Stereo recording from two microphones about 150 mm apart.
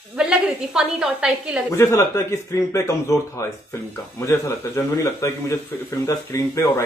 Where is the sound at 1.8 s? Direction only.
20° left (ahead or behind).